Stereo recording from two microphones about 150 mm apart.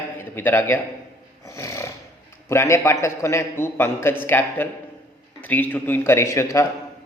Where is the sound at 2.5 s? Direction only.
20° left (ahead or behind).